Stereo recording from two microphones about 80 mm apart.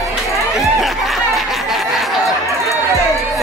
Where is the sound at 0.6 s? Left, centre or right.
Centre.